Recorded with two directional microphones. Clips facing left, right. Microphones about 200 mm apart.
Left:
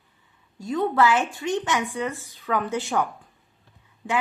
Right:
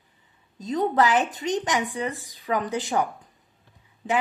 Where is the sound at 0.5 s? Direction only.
20° right (ahead or behind).